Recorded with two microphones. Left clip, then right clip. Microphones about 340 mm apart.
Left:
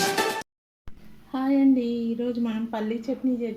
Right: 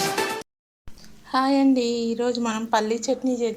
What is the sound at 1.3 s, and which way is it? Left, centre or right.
A woman's voice, right.